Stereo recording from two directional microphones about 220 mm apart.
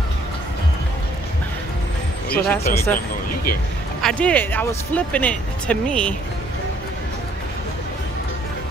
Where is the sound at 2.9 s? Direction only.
40° left (ahead or behind).